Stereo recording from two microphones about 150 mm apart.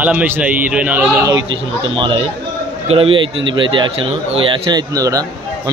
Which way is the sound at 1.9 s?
35° right (ahead or behind).